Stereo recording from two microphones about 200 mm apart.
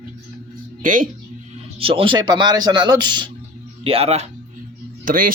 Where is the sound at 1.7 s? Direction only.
25° right (ahead or behind).